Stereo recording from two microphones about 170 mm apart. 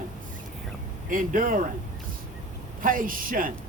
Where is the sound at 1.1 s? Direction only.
50° right (ahead or behind).